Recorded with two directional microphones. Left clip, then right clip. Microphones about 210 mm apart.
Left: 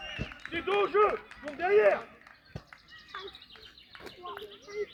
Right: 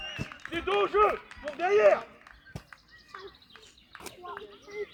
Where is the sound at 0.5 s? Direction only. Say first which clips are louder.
Right 1 dB; 45° right (ahead or behind).